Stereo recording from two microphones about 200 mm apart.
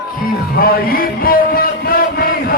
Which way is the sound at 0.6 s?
45° left (ahead or behind).